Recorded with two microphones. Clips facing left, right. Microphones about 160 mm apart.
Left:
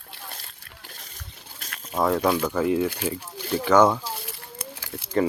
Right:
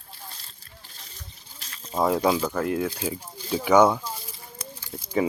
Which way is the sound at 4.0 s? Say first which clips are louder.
Left 2 dB; 75° left (ahead or behind).